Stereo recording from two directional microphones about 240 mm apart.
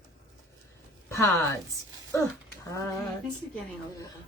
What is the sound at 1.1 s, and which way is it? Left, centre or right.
Speech, centre.